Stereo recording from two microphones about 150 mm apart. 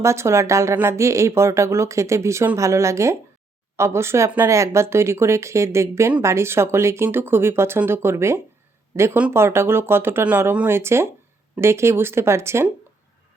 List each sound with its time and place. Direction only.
0.0 s speech: 20° right (ahead or behind)